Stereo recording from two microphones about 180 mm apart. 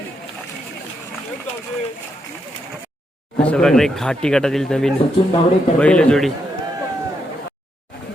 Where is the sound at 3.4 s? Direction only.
5° left (ahead or behind).